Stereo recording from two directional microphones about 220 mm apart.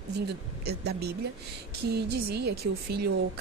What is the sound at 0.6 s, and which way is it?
Speech, 45° right (ahead or behind).